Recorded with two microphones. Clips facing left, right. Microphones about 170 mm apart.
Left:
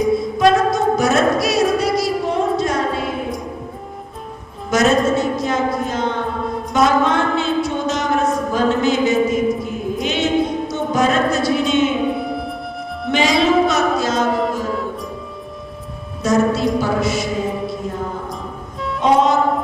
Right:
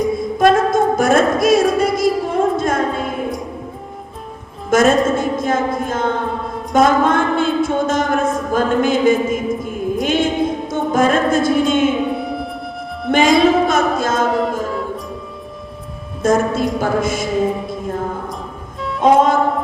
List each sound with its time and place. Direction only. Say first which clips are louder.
0.2 s a sound: right 1 dB; 50° right (ahead or behind)
4.7 s a woman's voice: right 2 dB; 50° right (ahead or behind)
6.4 s music: left 2 dB; centre (ahead or behind)
6.7 s a sound: right 2 dB; 50° right (ahead or behind)
12.1 s music: right 1 dB; centre (ahead or behind)
13.1 s music: right 4 dB; 50° right (ahead or behind)
14.3 s music: right 1 dB; centre (ahead or behind)
16.2 s a sound: right 1 dB; 50° right (ahead or behind)
16.7 s a woman's voice: even; 50° right (ahead or behind)
18.8 s music: right 1 dB; centre (ahead or behind)
19.0 s music: right 2 dB; 50° right (ahead or behind)